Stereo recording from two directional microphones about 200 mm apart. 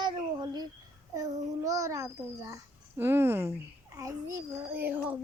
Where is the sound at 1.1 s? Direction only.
15° right (ahead or behind).